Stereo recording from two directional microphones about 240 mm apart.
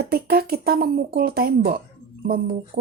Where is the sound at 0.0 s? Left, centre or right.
Right.